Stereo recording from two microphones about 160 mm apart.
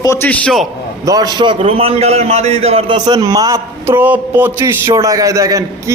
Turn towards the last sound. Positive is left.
turn(degrees=-20)  # may be behind; listen again after turning